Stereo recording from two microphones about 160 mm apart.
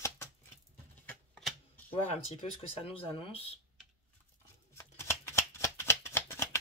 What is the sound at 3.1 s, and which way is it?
Speech, 30° left (ahead or behind).